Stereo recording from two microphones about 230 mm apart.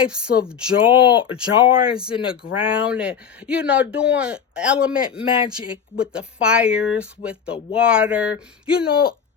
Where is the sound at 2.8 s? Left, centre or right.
Centre.